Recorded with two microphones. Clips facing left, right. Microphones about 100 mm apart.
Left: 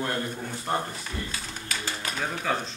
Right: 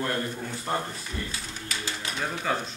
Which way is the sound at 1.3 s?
45° left (ahead or behind).